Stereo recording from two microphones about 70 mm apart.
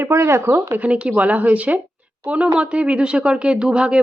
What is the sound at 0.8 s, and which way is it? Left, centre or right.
A woman's voice, centre.